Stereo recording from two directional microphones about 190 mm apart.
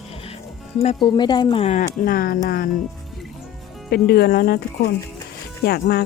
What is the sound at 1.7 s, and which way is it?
Speech, 45° left (ahead or behind).